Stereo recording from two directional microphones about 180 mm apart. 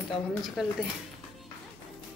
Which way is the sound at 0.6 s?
Centre (ahead or behind).